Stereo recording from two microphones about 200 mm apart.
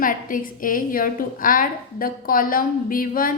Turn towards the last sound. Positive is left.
turn(degrees=45)  # may be behind; listen again after turning